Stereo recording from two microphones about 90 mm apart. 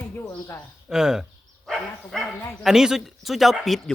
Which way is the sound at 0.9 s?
5° right (ahead or behind).